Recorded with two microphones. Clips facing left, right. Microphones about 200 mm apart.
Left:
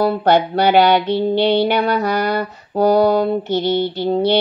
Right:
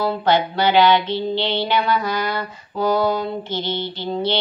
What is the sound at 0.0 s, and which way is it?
Mantra, 65° left (ahead or behind).